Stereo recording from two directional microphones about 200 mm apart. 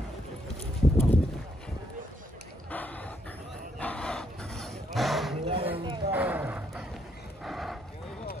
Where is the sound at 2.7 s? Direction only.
10° left (ahead or behind).